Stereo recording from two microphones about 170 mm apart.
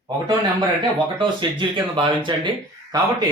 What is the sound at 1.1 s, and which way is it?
Speech, 25° right (ahead or behind).